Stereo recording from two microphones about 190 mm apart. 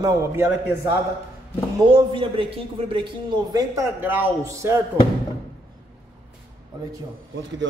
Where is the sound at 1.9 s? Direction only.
25° right (ahead or behind).